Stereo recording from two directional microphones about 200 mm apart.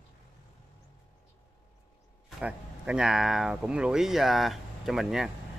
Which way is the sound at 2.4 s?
5° right (ahead or behind).